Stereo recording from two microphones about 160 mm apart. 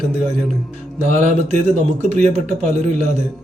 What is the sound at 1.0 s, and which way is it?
A man's voice, 45° right (ahead or behind).